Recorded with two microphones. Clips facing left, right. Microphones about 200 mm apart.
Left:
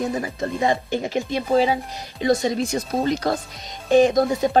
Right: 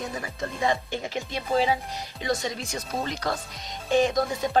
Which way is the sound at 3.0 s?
35° left (ahead or behind).